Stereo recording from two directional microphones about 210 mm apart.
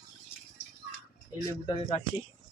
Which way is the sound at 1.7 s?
25° left (ahead or behind).